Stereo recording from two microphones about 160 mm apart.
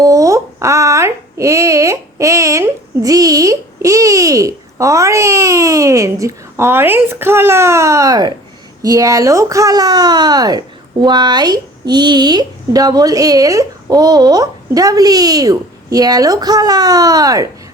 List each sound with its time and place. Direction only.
0.0 s a woman's voice: 20° right (ahead or behind)